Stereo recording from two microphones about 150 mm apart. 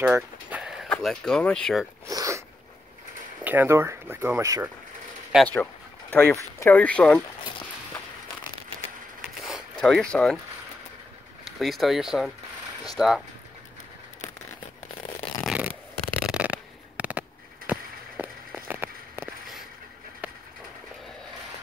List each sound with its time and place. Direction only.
0.0 s a sound: 10° right (ahead or behind)
1.0 s speech: 5° left (ahead or behind)
2.0 s a sound: 20° right (ahead or behind)
3.4 s speech: 15° right (ahead or behind)
5.3 s speech: 5° right (ahead or behind)
6.1 s speech: 15° left (ahead or behind)
9.4 s zipper: centre (ahead or behind)
11.6 s speech: centre (ahead or behind)
15.4 s a sound: 10° right (ahead or behind)
17.6 s walk: 10° right (ahead or behind)